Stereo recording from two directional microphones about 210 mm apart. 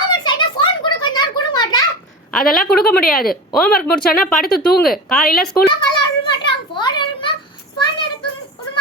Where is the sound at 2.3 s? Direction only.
Centre (ahead or behind).